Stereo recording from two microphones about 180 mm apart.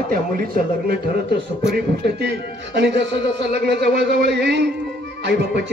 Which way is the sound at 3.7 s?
65° right (ahead or behind).